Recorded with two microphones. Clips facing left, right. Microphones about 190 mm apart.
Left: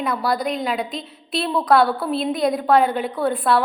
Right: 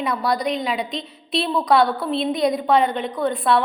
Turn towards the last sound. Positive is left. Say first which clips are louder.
# even
turn(degrees=5)  # may be behind; listen again after turning